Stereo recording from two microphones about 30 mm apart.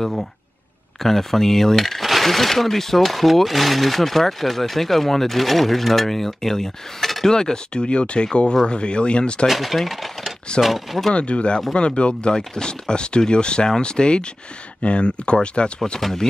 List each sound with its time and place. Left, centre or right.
1.0 s speech: centre; by 9.5 s left
9.5 s speech: centre
11.1 s speech: left
16.0 s speech: centre